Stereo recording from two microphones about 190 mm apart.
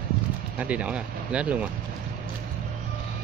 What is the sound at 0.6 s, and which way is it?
Speech, 5° right (ahead or behind).